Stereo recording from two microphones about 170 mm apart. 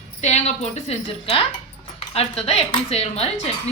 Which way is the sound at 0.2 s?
40° left (ahead or behind).